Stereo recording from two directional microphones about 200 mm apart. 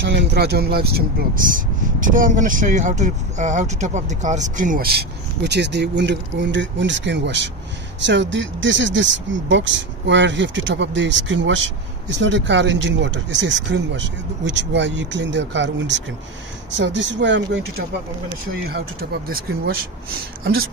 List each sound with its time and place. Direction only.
0.0 s speech: 60° right (ahead or behind)
18.7 s speech: 50° right (ahead or behind)